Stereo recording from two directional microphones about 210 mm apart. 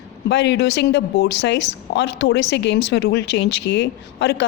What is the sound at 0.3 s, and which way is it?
A woman's voice, 55° left (ahead or behind).